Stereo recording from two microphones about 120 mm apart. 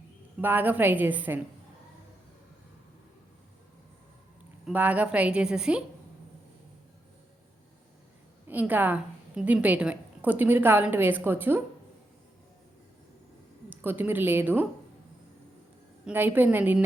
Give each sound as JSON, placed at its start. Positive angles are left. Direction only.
{"t": 0.4, "sound": "a woman's voice", "side_deg": -15}
{"t": 4.6, "sound": "a woman's voice", "side_deg": -10}
{"t": 8.4, "sound": "a woman's voice", "side_deg": -15}
{"t": 13.7, "sound": "a woman's voice", "side_deg": -15}
{"t": 16.0, "sound": "a woman's voice", "side_deg": -15}